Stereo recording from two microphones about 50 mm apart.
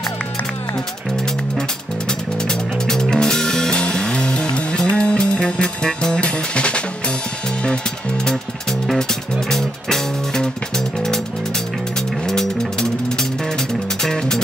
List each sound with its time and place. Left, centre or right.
2.0 s music: centre
9.5 s music: centre
12.3 s music: centre